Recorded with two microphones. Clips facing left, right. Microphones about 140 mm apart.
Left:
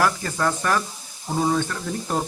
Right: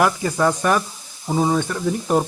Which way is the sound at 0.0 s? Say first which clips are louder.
Right 4 dB; 15° right (ahead or behind).